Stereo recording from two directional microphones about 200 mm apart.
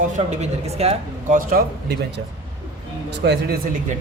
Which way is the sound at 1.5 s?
50° right (ahead or behind).